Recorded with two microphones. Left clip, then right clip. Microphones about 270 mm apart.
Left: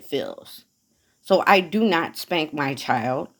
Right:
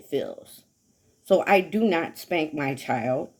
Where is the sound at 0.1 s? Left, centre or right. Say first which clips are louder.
Left 1 dB; centre.